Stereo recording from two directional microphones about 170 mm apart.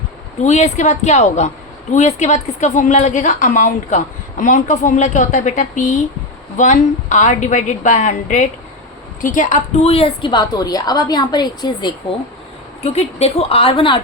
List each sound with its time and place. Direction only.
0.4 s a woman's voice: 45° left (ahead or behind); by 11.9 s 25° left (ahead or behind)
12.8 s a woman's voice: 40° left (ahead or behind)